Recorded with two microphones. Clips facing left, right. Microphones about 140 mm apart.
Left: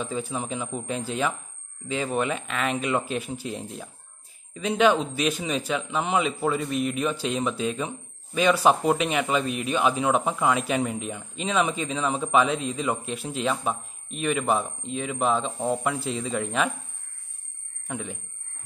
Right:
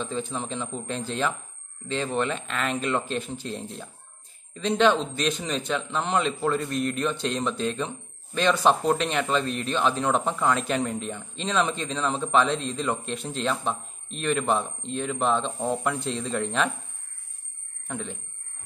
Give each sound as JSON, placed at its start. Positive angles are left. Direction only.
{"t": 0.0, "sound": "speech", "side_deg": 5}
{"t": 17.8, "sound": "speech", "side_deg": 5}